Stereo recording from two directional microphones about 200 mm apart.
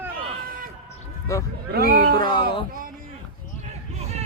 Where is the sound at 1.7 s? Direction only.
50° right (ahead or behind).